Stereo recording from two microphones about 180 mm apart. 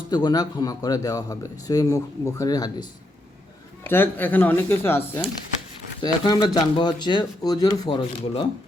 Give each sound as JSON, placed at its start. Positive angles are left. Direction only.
{"t": 0.1, "sound": "speech", "side_deg": 25}
{"t": 3.8, "sound": "speech", "side_deg": 10}
{"t": 6.0, "sound": "speech", "side_deg": 25}